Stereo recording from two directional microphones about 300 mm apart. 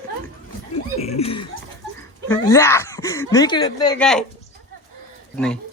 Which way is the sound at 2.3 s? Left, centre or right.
Centre.